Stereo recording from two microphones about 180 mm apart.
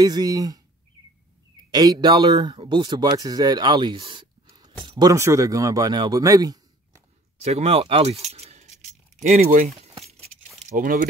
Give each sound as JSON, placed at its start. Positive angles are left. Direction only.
{"t": 0.0, "sound": "speech", "side_deg": -20}
{"t": 1.7, "sound": "speech", "side_deg": -25}
{"t": 7.3, "sound": "keys jangling", "side_deg": -35}
{"t": 9.2, "sound": "speech", "side_deg": -40}
{"t": 10.0, "sound": "keys jangling", "side_deg": -35}
{"t": 10.8, "sound": "speech", "side_deg": -50}